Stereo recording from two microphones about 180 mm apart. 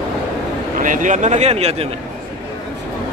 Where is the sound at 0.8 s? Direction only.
45° right (ahead or behind).